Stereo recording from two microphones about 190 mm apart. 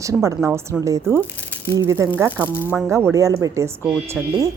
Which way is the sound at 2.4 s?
10° left (ahead or behind).